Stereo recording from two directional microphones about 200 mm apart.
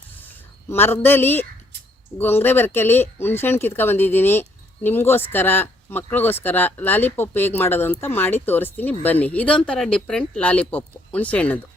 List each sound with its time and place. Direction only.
0.2 s speech: 10° left (ahead or behind)